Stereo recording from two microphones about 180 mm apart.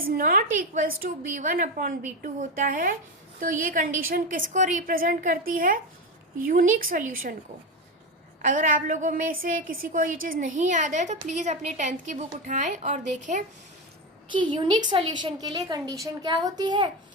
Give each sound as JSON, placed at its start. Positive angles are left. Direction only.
{"t": 0.1, "sound": "a woman's voice", "side_deg": -50}
{"t": 8.4, "sound": "a woman's voice", "side_deg": -45}
{"t": 14.3, "sound": "a woman's voice", "side_deg": -25}